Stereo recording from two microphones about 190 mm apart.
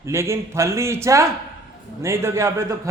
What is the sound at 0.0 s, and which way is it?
A man's voice, 15° right (ahead or behind).